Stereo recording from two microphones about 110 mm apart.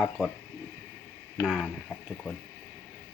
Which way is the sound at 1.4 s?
5° right (ahead or behind).